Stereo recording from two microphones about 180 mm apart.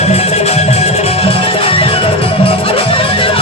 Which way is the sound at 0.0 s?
35° left (ahead or behind).